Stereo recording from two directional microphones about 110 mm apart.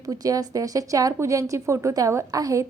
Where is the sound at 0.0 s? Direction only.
35° right (ahead or behind).